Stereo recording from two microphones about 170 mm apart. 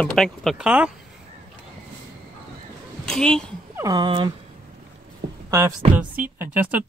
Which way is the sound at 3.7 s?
20° right (ahead or behind).